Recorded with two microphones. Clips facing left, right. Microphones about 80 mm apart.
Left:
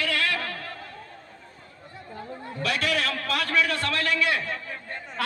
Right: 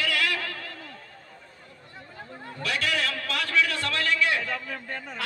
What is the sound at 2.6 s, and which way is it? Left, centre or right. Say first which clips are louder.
A man's voice: left 2 dB; left.